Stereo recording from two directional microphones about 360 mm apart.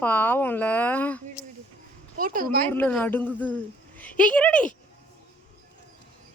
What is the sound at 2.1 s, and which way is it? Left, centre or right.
Speech, right.